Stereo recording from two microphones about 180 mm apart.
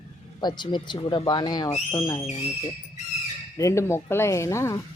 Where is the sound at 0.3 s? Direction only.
25° left (ahead or behind).